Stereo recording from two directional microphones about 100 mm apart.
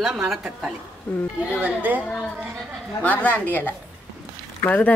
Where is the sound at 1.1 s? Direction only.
15° left (ahead or behind).